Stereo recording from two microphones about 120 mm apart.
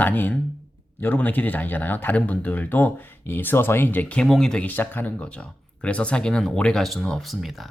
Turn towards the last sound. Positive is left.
turn(degrees=0)  # may be behind; listen again after turning